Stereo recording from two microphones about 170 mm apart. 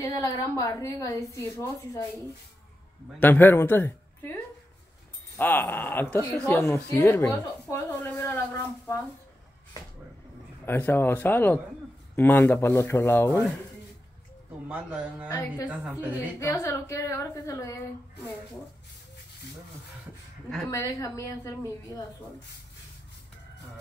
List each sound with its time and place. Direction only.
0.0 s a woman's voice: 20° left (ahead or behind)
3.2 s a woman's voice: 10° left (ahead or behind)
5.4 s a woman's voice: 10° left (ahead or behind)
10.6 s a woman's voice: 15° left (ahead or behind)
14.7 s a man's voice: 10° right (ahead or behind)
15.2 s a woman's voice: 20° left (ahead or behind)
15.6 s a man's voice: 10° right (ahead or behind)
16.3 s a woman's voice: 15° left (ahead or behind)
20.6 s a woman's voice: 20° left (ahead or behind)